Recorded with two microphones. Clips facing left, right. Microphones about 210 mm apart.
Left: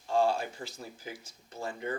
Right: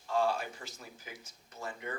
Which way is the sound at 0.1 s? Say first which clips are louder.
Left 4 dB; 30° left (ahead or behind).